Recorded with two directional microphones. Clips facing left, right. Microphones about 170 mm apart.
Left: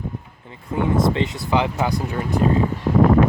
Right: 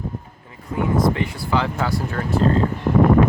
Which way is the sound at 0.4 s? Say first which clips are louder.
Left 1 dB; 25° left (ahead or behind).